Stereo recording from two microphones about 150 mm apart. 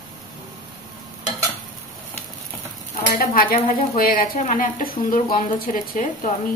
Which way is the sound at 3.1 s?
75° left (ahead or behind).